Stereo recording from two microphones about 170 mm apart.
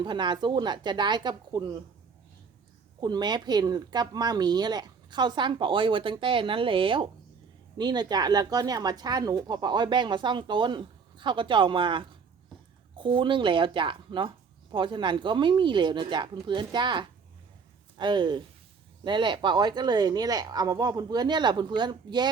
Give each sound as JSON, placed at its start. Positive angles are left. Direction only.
{"t": 0.0, "sound": "a woman's voice", "side_deg": -25}
{"t": 3.0, "sound": "a woman's voice", "side_deg": -25}